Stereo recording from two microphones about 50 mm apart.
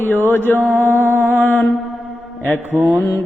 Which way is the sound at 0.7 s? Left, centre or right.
Right.